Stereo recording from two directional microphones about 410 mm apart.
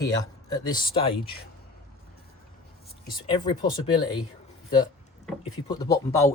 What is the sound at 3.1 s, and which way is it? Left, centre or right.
Speech, centre.